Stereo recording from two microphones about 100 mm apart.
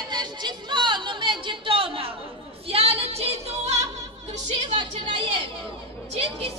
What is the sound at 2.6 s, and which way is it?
Music, 80° right.